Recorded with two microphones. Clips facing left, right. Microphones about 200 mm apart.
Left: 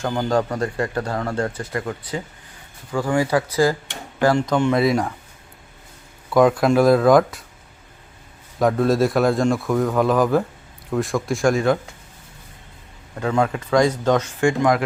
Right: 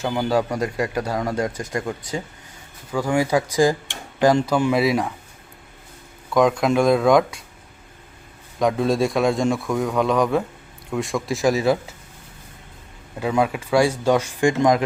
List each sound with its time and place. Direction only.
0.0 s a man's voice: 5° right (ahead or behind)
6.3 s a man's voice: 5° left (ahead or behind)
8.5 s a man's voice: centre (ahead or behind)
13.1 s speech: 10° right (ahead or behind)